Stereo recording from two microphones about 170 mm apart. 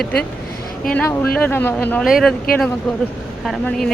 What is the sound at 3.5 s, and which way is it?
Speech, 5° left (ahead or behind).